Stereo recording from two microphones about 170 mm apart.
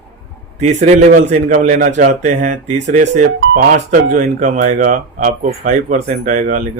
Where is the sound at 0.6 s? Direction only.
45° right (ahead or behind).